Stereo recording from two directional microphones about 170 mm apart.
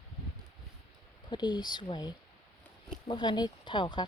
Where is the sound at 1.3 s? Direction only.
25° left (ahead or behind).